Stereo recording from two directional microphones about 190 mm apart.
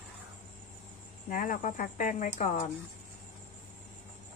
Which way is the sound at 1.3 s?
45° left (ahead or behind).